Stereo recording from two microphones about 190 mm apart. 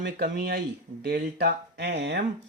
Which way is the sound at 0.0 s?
60° right (ahead or behind).